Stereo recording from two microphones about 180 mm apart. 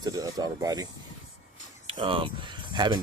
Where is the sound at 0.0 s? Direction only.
20° right (ahead or behind).